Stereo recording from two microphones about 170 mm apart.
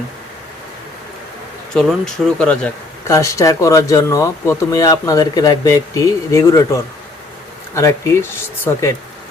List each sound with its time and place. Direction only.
1.7 s speech: 5° left (ahead or behind)
3.1 s speech: 20° left (ahead or behind)